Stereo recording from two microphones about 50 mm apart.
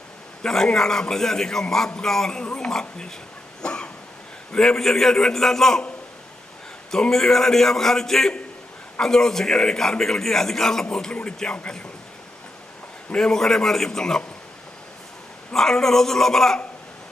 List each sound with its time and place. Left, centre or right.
0.4 s a man's voice: centre
3.6 s cough: centre
4.5 s a man's voice: centre
6.9 s a man's voice: centre
13.1 s a man's voice: centre
15.5 s a man's voice: centre